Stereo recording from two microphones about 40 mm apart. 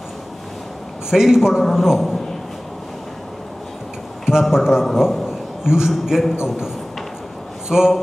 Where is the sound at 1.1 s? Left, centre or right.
Centre.